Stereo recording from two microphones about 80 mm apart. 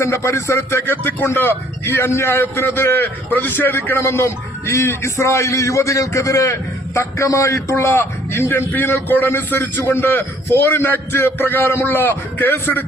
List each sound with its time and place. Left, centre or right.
0.0 s a man's voice: left